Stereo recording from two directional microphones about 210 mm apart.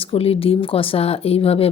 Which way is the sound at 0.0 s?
25° left (ahead or behind).